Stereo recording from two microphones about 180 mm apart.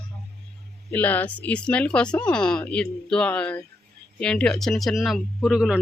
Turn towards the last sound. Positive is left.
turn(degrees=-5)  # may be behind; listen again after turning